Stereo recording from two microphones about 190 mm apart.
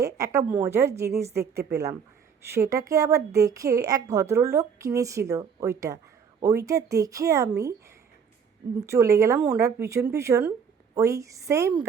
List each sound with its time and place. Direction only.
0.0 s a woman's voice: 15° right (ahead or behind)
2.5 s a woman's voice: 15° right (ahead or behind)
8.8 s a woman's voice: 15° right (ahead or behind)